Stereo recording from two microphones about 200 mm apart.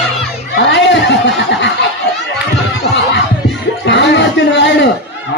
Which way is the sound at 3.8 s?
60° left (ahead or behind).